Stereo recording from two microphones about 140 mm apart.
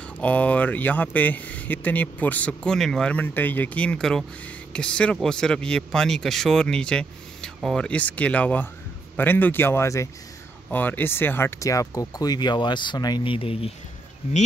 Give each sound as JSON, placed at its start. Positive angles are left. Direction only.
{"t": 0.2, "sound": "speech", "side_deg": 10}